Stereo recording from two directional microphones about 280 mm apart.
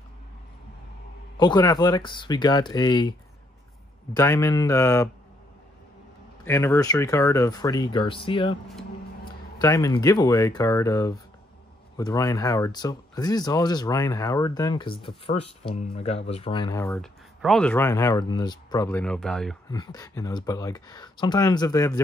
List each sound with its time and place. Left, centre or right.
1.4 s speech: centre
6.4 s speech: centre
19.7 s speech: centre